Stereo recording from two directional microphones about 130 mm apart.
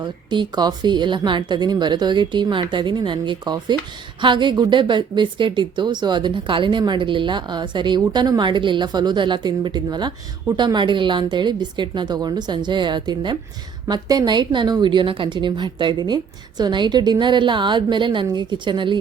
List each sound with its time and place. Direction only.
0.3 s a woman's voice: 35° right (ahead or behind)